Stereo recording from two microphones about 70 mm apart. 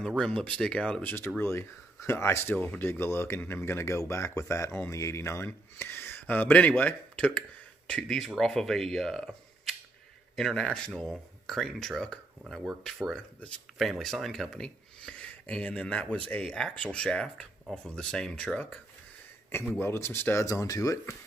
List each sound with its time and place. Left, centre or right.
0.2 s speech: centre
1.0 s speech: left
1.4 s speech: left
2.5 s speech: left
6.2 s speech: left; by 9.3 s centre
10.3 s speech: centre
19.8 s speech: left
20.4 s speech: left